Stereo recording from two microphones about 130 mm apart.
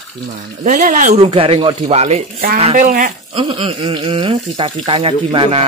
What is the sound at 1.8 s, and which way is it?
Speech, 55° right (ahead or behind).